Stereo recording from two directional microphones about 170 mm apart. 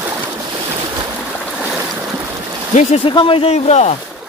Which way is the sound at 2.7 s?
40° left (ahead or behind).